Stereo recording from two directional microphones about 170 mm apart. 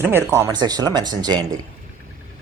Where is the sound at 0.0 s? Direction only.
15° right (ahead or behind).